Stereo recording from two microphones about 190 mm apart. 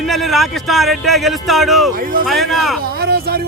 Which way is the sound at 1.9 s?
50° right (ahead or behind).